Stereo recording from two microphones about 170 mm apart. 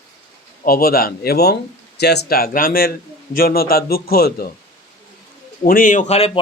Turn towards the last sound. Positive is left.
turn(degrees=40)  # may be behind; listen again after turning